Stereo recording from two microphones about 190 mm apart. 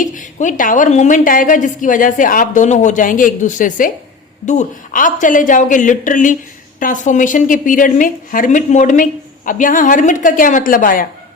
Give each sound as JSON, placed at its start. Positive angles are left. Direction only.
{"t": 0.0, "sound": "a woman's voice", "side_deg": 40}